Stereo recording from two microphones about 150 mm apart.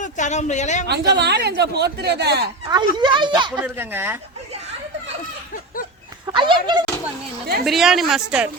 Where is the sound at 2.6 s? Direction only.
30° right (ahead or behind).